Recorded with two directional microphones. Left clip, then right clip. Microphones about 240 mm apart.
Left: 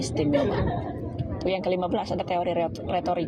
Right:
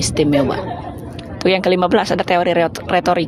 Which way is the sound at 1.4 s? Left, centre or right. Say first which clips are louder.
Right 11 dB; right.